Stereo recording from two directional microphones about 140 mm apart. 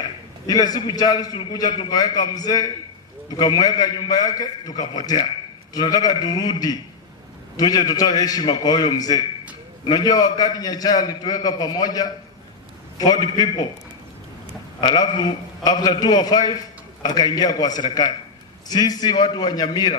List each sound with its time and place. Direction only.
0.5 s a man's voice: 30° left (ahead or behind)
14.8 s a man's voice: 30° left (ahead or behind)